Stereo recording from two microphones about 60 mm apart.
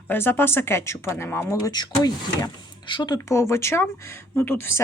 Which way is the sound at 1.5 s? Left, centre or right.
Left.